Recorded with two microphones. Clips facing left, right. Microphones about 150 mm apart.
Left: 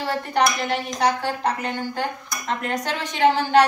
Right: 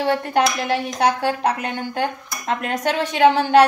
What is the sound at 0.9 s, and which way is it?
Speech, 65° right (ahead or behind).